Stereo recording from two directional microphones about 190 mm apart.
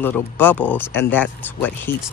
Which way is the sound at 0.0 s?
10° left (ahead or behind).